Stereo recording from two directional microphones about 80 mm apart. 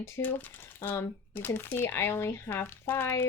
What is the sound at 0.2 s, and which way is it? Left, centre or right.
Speech, left.